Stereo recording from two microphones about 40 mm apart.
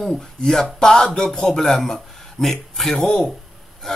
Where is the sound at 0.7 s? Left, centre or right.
Centre.